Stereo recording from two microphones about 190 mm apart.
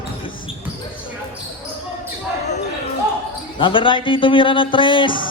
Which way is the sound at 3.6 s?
25° left (ahead or behind).